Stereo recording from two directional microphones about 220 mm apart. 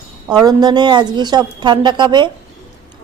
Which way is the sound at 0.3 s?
15° right (ahead or behind).